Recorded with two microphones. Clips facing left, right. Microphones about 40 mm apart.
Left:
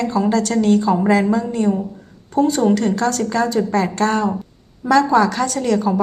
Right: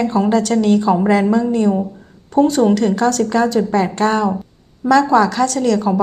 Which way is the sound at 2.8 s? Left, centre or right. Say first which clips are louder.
Right 3 dB; centre.